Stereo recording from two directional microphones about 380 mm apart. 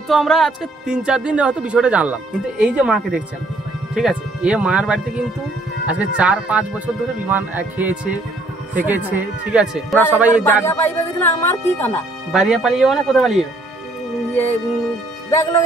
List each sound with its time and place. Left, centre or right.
0.1 s speech: centre